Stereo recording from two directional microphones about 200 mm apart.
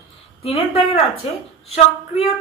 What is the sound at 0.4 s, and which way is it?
Speech, 30° left (ahead or behind).